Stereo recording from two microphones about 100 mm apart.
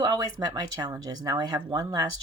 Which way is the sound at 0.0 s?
45° right (ahead or behind).